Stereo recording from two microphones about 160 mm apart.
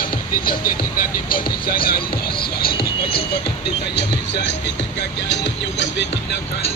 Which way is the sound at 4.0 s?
90° left.